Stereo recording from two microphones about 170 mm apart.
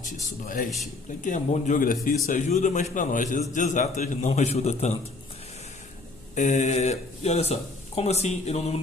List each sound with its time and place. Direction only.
0.0 s a man's voice: 50° left (ahead or behind)
6.3 s speech: 45° left (ahead or behind)